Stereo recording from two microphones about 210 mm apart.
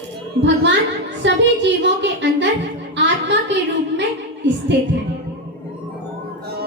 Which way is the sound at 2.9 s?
55° right (ahead or behind).